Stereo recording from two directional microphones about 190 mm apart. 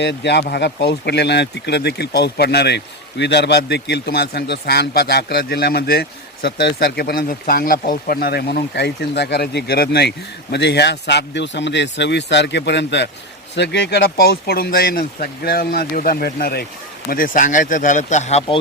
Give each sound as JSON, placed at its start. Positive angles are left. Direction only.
{"t": 0.0, "sound": "speech", "side_deg": 65}